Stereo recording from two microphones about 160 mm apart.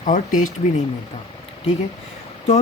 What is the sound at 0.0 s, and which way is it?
Speech, 50° left (ahead or behind).